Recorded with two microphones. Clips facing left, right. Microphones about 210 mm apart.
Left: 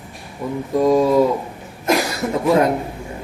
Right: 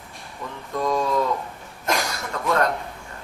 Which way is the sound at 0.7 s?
25° left (ahead or behind).